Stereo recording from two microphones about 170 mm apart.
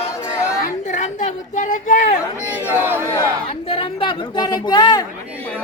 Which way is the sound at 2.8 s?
15° right (ahead or behind).